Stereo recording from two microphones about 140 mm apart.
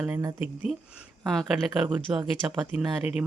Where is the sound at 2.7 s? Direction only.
5° right (ahead or behind).